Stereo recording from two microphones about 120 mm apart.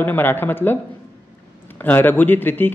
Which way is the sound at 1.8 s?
15° left (ahead or behind).